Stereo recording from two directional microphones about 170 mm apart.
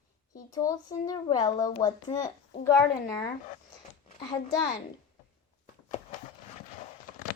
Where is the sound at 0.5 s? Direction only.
20° left (ahead or behind).